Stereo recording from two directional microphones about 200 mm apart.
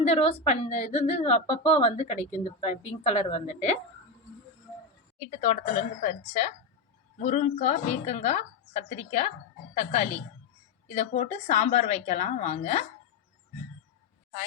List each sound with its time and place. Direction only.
0.0 s a woman's voice: 30° left (ahead or behind)
5.3 s a woman's voice: 35° left (ahead or behind)